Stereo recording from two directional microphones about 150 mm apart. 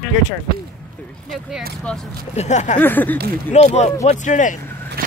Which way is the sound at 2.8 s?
10° left (ahead or behind).